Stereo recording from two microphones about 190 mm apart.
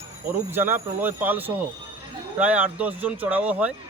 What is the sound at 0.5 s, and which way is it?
Speech, 10° right (ahead or behind).